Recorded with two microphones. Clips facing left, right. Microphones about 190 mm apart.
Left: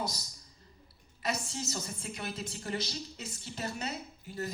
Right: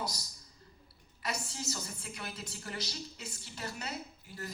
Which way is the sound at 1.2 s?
20° left (ahead or behind).